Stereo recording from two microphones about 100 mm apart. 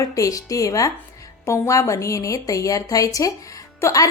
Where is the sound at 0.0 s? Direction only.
35° left (ahead or behind).